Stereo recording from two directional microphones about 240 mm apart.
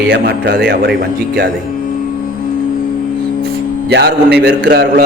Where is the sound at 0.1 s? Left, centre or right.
Right.